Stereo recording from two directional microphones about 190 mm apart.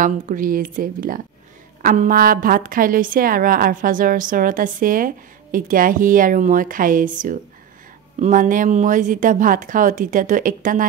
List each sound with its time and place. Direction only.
0.0 s a woman's voice: 45° right (ahead or behind)